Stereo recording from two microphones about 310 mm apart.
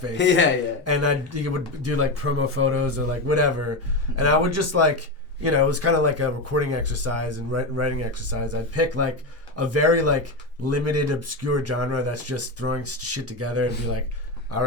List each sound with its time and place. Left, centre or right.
0.9 s speech: right